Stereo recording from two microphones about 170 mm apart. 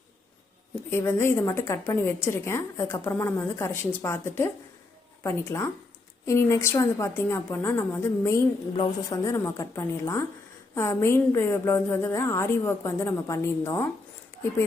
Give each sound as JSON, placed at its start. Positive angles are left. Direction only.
{"t": 0.9, "sound": "a woman's voice", "side_deg": 15}
{"t": 8.7, "sound": "a woman's voice", "side_deg": 30}
{"t": 9.2, "sound": "a woman's voice", "side_deg": 15}